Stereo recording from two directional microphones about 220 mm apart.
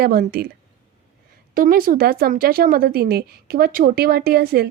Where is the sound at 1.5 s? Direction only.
40° right (ahead or behind).